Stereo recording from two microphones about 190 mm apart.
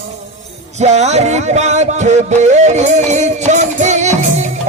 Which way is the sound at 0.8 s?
35° right (ahead or behind).